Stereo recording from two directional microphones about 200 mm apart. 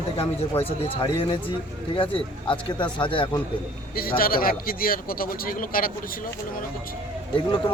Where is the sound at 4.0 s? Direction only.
45° left (ahead or behind).